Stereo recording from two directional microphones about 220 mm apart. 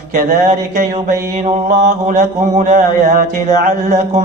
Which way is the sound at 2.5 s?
35° right (ahead or behind).